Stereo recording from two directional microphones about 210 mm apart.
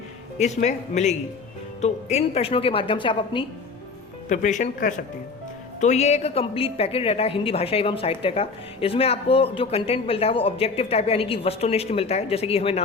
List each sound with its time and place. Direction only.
0.3 s a woman's voice: 35° left (ahead or behind)
4.3 s a woman's voice: 35° left (ahead or behind)